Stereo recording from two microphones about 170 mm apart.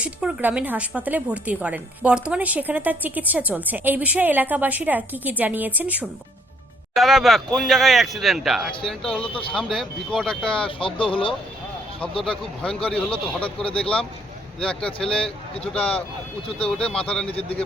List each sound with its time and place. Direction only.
0.0 s speech: 5° right (ahead or behind)
10.7 s speech: 30° left (ahead or behind)
12.2 s speech: 5° left (ahead or behind)